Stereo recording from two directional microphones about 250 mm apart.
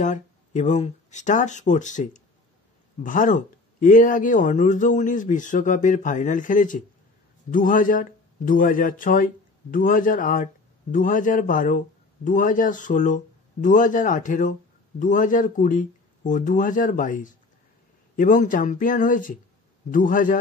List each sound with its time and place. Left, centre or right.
0.0 s speech: left